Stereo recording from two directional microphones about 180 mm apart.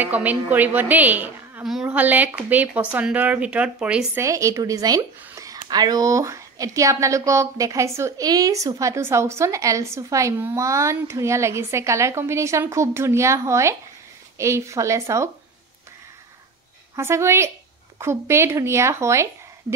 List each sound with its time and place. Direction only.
0.0 s speech: 10° right (ahead or behind)
16.9 s speech: 15° right (ahead or behind)